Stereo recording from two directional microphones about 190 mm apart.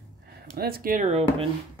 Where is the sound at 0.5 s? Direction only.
55° right (ahead or behind); by 1.5 s 35° right (ahead or behind).